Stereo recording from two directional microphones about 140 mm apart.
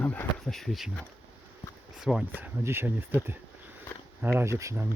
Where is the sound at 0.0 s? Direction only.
10° left (ahead or behind).